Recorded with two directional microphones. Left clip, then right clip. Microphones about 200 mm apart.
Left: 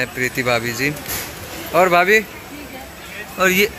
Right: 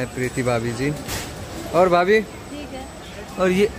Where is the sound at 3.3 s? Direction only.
15° right (ahead or behind).